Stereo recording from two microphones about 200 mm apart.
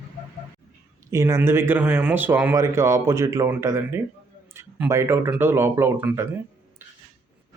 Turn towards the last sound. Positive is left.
turn(degrees=-10)  # may be behind; listen again after turning